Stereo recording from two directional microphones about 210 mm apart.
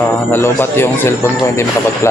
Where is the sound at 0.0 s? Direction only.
Centre (ahead or behind).